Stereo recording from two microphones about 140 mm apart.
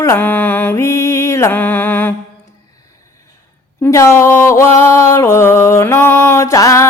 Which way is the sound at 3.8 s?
20° left (ahead or behind).